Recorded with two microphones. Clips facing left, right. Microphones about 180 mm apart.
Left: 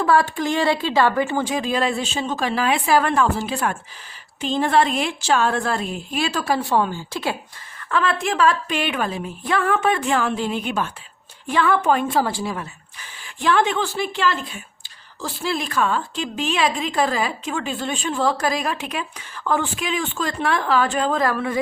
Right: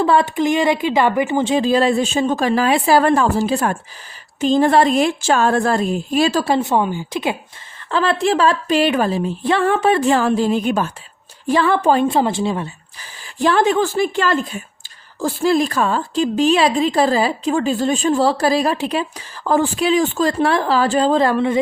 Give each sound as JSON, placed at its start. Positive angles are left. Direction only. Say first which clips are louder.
{"t": 0.0, "sound": "speech", "louder": "right 3 dB", "side_deg": -25}
{"t": 6.5, "sound": "a woman's voice", "louder": "right 3 dB", "side_deg": -20}
{"t": 7.9, "sound": "speech", "louder": "right 5 dB", "side_deg": -30}